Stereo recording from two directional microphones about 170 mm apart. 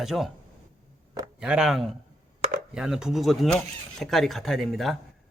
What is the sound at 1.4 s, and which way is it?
A man's voice, 5° right (ahead or behind).